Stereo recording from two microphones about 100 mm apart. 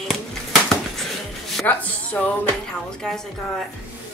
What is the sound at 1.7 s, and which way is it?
Speech, 15° left (ahead or behind).